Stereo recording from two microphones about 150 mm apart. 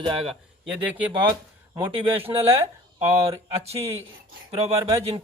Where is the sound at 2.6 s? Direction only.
20° right (ahead or behind).